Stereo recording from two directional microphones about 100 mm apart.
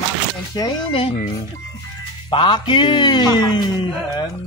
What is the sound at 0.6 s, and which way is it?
Speech, 40° left (ahead or behind).